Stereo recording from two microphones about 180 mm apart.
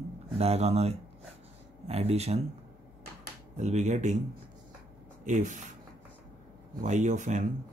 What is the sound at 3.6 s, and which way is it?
Speech, 40° right (ahead or behind).